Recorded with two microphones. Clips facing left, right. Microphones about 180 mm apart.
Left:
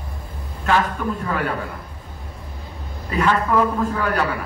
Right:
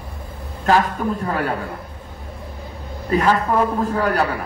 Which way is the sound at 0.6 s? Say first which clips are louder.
Right 3 dB; 40° right (ahead or behind).